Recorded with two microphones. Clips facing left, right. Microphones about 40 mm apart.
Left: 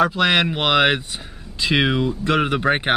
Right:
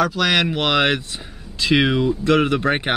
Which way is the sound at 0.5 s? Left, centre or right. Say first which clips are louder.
Left 1 dB; centre.